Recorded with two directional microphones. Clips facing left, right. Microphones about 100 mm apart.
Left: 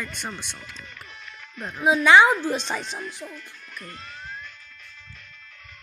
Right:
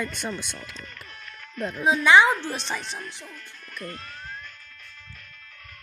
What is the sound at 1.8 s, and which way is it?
Speech, 20° left (ahead or behind).